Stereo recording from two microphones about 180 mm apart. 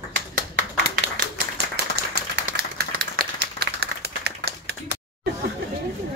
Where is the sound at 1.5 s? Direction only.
60° right (ahead or behind).